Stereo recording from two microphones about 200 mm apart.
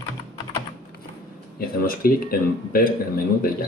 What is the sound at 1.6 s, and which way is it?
A man's voice, 45° left (ahead or behind).